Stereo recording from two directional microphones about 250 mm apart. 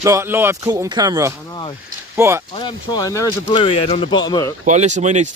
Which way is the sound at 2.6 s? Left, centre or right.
Centre.